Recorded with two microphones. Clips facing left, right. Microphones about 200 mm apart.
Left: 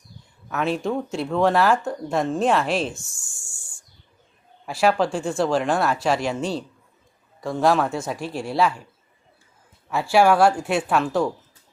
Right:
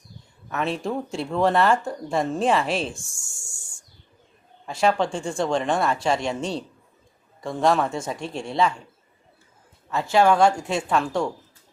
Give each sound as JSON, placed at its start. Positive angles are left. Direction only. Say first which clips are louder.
{"t": 0.4, "sound": "speech", "louder": "left 2 dB", "side_deg": 0}
{"t": 2.9, "sound": "speech", "louder": "even", "side_deg": -30}
{"t": 4.6, "sound": "speech", "louder": "left 2 dB", "side_deg": 5}
{"t": 9.9, "sound": "speech", "louder": "left 1 dB", "side_deg": 10}